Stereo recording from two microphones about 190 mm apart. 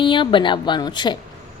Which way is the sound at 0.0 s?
25° left (ahead or behind).